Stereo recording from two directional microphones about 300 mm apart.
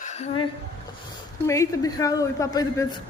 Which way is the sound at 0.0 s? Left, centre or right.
Left.